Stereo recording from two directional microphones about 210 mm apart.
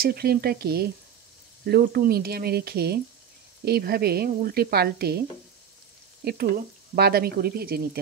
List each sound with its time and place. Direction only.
0.0 s a woman's voice: 45° right (ahead or behind)
7.0 s a woman's voice: 45° right (ahead or behind)